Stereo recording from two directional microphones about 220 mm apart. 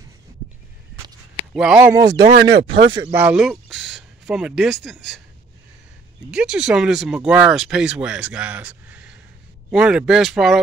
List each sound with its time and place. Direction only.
1.5 s speech: 5° right (ahead or behind)
2.3 s speech: 50° right (ahead or behind)
2.9 s speech: 15° right (ahead or behind)
6.3 s speech: 5° right (ahead or behind)